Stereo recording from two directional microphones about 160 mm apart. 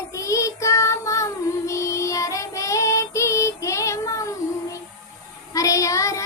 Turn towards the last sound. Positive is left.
turn(degrees=20)  # may be behind; listen again after turning